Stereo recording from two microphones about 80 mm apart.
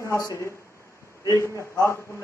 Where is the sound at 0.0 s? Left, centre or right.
Left.